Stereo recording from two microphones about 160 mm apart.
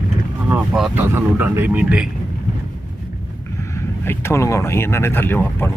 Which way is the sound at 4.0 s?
15° left (ahead or behind).